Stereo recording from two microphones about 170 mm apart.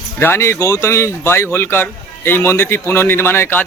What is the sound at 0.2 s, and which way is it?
A man's voice, 15° left (ahead or behind).